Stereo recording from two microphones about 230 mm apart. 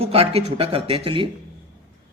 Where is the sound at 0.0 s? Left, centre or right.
Right.